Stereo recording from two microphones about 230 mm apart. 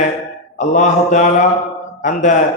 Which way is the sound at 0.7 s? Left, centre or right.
Left.